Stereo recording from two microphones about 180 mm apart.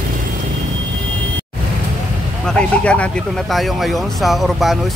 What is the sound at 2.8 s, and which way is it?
Speech, 5° left (ahead or behind).